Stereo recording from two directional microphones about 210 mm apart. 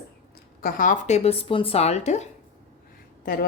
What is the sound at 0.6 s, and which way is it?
Speech, 40° left (ahead or behind).